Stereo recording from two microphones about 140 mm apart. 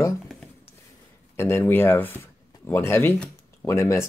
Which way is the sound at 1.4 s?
15° left (ahead or behind).